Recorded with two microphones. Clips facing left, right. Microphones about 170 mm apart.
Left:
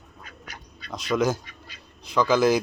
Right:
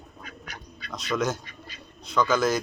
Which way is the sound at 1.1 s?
15° left (ahead or behind).